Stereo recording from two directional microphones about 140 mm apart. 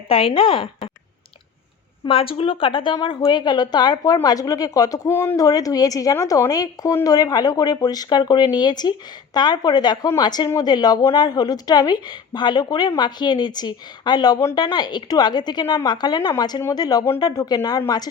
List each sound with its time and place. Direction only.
0.1 s a woman's voice: 40° left (ahead or behind)
2.0 s a woman's voice: 40° left (ahead or behind); by 5.4 s 15° left (ahead or behind)
5.4 s a woman's voice: 25° left (ahead or behind)